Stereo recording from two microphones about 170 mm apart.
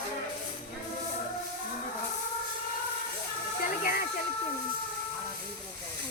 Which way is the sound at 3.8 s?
60° left (ahead or behind).